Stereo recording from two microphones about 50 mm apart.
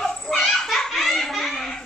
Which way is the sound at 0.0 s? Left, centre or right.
Centre.